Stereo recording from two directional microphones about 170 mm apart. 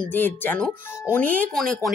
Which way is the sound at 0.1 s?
10° left (ahead or behind).